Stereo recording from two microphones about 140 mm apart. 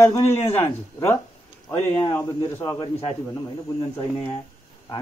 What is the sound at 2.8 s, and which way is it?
Speech, 40° left (ahead or behind).